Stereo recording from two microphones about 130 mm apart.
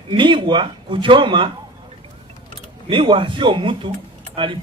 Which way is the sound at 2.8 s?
40° right (ahead or behind).